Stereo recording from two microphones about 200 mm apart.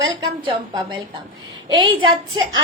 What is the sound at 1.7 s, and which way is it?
Speech, 20° right (ahead or behind).